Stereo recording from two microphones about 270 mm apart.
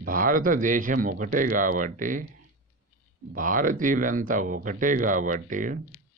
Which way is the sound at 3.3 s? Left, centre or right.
Right.